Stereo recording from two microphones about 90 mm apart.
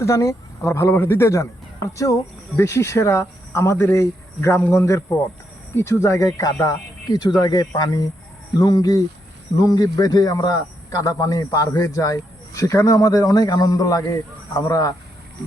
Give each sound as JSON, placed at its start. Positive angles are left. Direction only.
{"t": 0.0, "sound": "a man's voice", "side_deg": 35}